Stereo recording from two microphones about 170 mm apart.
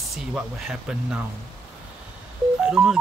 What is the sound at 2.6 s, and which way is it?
Telephone dialing, 5° right (ahead or behind).